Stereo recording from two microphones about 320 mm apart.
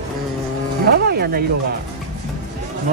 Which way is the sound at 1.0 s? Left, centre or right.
Right.